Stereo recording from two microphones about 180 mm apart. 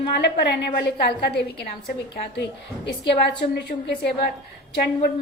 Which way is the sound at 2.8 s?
70° left (ahead or behind).